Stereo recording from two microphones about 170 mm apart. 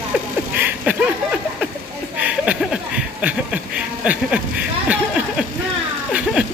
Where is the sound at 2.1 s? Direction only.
5° right (ahead or behind).